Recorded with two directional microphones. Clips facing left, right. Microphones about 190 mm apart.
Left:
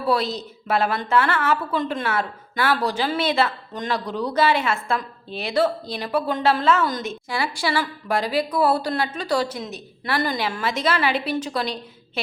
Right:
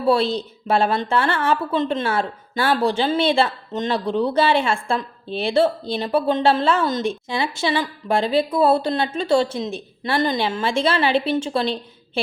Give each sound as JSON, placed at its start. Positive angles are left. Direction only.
{"t": 0.0, "sound": "a woman's voice", "side_deg": -30}